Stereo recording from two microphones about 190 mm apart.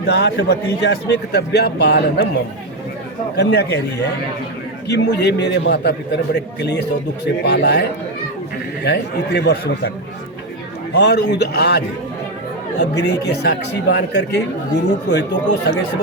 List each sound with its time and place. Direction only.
0.0 s a man's voice: 65° left (ahead or behind)
3.3 s a man's voice: 60° left (ahead or behind)
4.9 s a man's voice: 65° left (ahead or behind)
10.9 s a man's voice: 65° left (ahead or behind)
12.8 s a man's voice: 65° left (ahead or behind)